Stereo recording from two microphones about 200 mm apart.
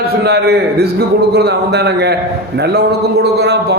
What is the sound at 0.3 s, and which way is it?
A man's voice, 55° right (ahead or behind).